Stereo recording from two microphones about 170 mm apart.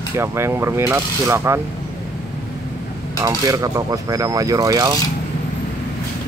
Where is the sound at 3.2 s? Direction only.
20° right (ahead or behind).